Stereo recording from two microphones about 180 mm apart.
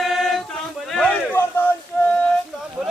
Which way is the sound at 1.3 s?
10° left (ahead or behind).